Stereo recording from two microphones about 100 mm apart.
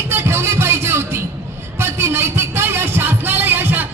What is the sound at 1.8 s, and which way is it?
Music, 25° right (ahead or behind).